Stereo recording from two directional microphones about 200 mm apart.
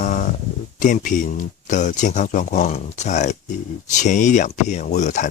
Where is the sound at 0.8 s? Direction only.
40° left (ahead or behind).